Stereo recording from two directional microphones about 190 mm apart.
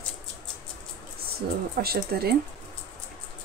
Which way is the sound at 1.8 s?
55° right (ahead or behind).